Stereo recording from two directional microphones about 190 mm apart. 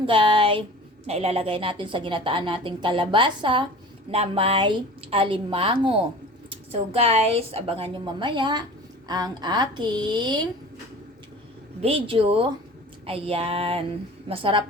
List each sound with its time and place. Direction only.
0.0 s a woman's voice: 25° right (ahead or behind)
11.8 s a woman's voice: 30° right (ahead or behind)